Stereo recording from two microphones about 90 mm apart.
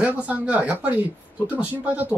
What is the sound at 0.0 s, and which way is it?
Speech, 15° right (ahead or behind).